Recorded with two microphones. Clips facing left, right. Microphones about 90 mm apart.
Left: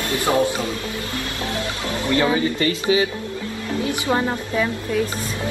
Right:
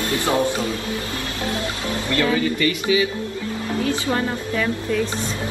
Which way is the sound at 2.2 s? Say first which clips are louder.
Even; 25° left (ahead or behind).